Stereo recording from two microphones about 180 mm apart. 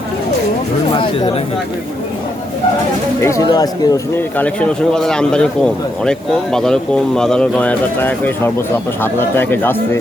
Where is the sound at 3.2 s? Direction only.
15° left (ahead or behind).